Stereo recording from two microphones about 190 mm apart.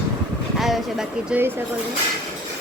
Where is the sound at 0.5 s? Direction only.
Centre (ahead or behind).